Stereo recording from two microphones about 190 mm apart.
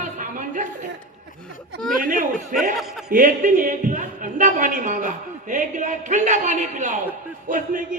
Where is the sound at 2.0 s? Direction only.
45° right (ahead or behind).